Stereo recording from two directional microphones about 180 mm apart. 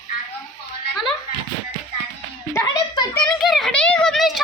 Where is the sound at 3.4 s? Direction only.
Centre (ahead or behind).